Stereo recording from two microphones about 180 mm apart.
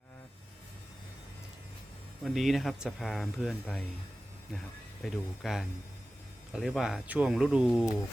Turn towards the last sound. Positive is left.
turn(degrees=-5)  # may be behind; listen again after turning